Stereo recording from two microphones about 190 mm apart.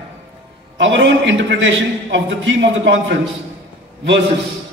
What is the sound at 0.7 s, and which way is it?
A man's voice, 75° right (ahead or behind).